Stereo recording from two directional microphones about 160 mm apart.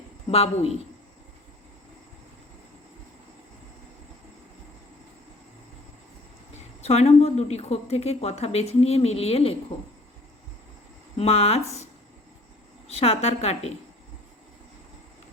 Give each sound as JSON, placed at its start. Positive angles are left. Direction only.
{"t": 0.3, "sound": "a woman's voice", "side_deg": 40}
{"t": 6.8, "sound": "a woman's voice", "side_deg": 40}
{"t": 11.2, "sound": "a woman's voice", "side_deg": 40}
{"t": 12.9, "sound": "a woman's voice", "side_deg": 40}